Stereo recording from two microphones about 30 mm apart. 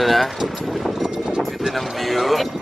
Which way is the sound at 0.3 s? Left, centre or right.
Centre.